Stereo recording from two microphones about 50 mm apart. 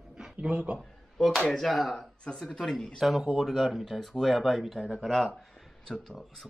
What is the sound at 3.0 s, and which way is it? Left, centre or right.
Speech, centre.